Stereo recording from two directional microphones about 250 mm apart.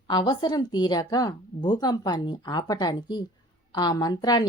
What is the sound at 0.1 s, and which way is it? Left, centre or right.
A woman's voice, centre.